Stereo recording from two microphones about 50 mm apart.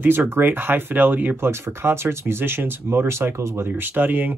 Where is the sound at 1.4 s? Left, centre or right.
Right.